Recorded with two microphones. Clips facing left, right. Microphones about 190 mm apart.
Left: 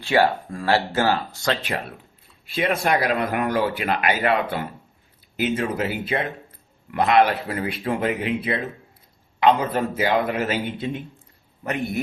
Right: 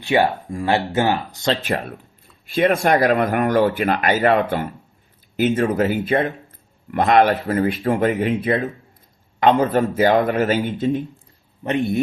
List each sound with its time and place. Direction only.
0.0 s speech: 20° right (ahead or behind)
2.6 s speech: 50° right (ahead or behind)
11.6 s speech: 25° right (ahead or behind)